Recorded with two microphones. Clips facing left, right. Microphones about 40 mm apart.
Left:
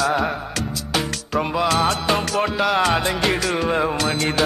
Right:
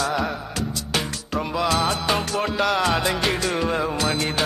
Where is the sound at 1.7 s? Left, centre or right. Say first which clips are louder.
Left 1 dB; centre.